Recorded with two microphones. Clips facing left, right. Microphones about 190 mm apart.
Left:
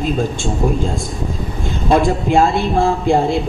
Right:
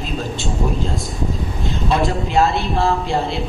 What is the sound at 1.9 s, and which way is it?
A man's voice, 50° left (ahead or behind).